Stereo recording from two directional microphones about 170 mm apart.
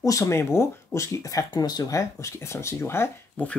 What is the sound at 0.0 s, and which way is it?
Speech, 20° left (ahead or behind).